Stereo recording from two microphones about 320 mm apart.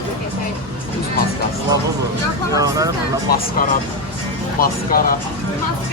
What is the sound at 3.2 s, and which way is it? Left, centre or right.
Speech, left.